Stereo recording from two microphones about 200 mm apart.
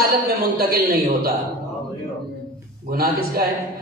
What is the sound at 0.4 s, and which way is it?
Speech, 50° right (ahead or behind).